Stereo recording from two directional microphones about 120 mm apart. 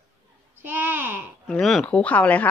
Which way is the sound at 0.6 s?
15° right (ahead or behind).